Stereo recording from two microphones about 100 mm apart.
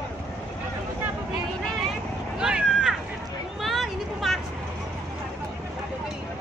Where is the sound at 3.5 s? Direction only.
Centre (ahead or behind).